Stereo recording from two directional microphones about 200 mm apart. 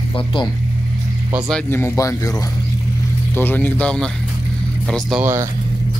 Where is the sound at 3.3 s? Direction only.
10° left (ahead or behind).